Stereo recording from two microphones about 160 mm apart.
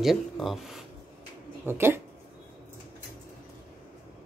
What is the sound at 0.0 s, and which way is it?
Speech, centre (ahead or behind).